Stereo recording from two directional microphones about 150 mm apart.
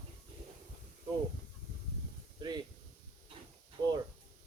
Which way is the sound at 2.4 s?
30° right (ahead or behind).